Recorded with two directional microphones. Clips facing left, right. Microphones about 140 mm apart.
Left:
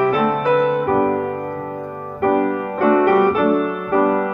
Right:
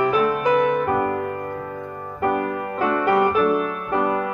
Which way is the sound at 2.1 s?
45° left (ahead or behind).